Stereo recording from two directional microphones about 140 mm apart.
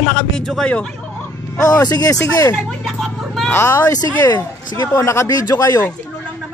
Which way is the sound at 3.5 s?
20° left (ahead or behind).